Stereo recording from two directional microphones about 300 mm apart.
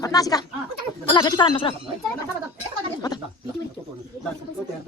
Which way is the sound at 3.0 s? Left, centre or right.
Centre.